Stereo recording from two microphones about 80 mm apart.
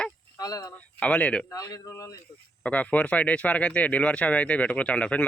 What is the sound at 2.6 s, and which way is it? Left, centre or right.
Speech, centre.